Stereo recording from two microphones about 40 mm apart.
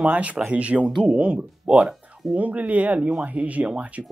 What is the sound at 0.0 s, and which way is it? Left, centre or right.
Speech, right.